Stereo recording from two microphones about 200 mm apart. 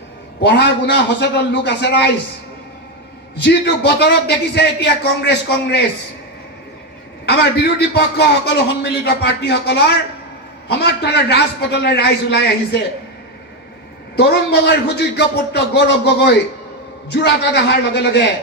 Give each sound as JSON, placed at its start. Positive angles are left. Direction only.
{"t": 0.4, "sound": "a man's voice", "side_deg": 60}
{"t": 3.3, "sound": "a man's voice", "side_deg": 60}
{"t": 7.2, "sound": "a man's voice", "side_deg": 55}
{"t": 14.1, "sound": "a man's voice", "side_deg": 55}